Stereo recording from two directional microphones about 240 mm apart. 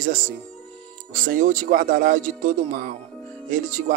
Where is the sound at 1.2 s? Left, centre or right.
Right.